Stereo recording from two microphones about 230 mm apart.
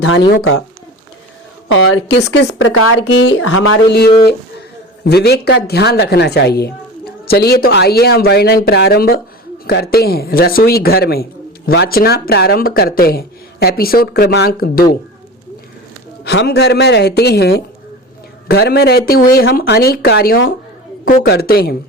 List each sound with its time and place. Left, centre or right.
1.6 s speech: left
2.7 s speech: left
3.0 s speech: left
5.0 s a woman's voice: left
16.2 s a woman's voice: left